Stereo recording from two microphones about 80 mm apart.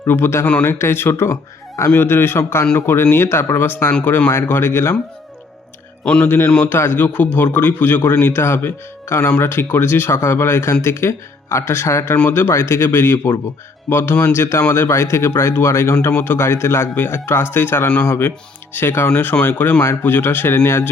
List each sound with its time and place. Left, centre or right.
0.1 s speech: left
6.2 s speech: left